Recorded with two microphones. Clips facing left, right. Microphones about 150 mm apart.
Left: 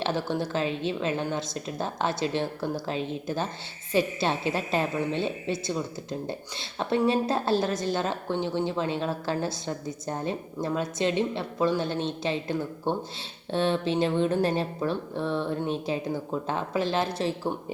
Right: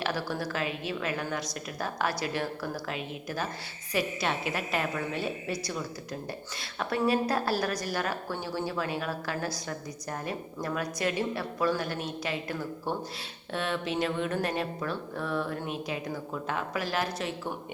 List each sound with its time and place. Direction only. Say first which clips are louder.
0.0 s a woman's voice: left 4 dB; 25° left (ahead or behind)